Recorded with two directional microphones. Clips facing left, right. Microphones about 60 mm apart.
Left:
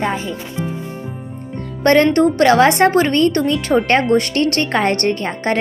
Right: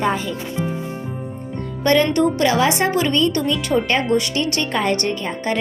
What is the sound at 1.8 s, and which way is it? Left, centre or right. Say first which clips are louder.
Speech: left 4 dB; left.